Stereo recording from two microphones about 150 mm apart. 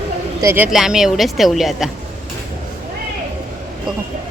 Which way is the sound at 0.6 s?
5° right (ahead or behind).